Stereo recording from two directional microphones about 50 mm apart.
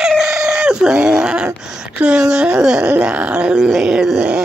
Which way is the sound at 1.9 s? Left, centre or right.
Right.